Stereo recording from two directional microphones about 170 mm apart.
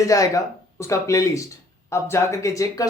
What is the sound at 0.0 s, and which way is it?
Speech, 20° left (ahead or behind).